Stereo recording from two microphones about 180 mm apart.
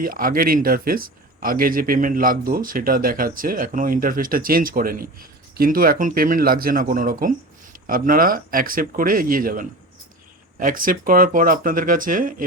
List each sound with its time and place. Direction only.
0.0 s speech: 50° right (ahead or behind)